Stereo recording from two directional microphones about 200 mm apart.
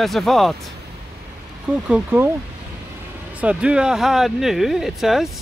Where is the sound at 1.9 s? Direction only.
10° right (ahead or behind).